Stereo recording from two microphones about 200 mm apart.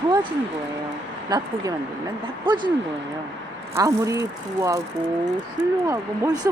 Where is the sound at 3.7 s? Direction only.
15° right (ahead or behind).